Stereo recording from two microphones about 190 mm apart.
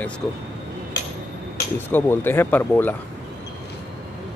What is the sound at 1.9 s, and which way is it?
Speech, 10° left (ahead or behind).